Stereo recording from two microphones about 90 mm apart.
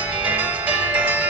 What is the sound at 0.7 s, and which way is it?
Music, 15° right (ahead or behind).